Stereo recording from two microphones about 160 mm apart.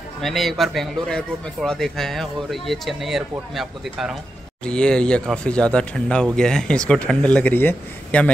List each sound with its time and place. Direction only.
0.2 s a man's voice: centre (ahead or behind)